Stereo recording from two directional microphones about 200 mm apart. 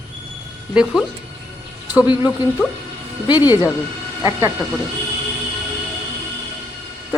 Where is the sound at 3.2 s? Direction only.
20° left (ahead or behind).